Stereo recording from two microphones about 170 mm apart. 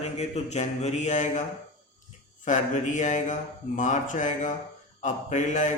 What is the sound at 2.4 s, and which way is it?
Speech, 45° left (ahead or behind).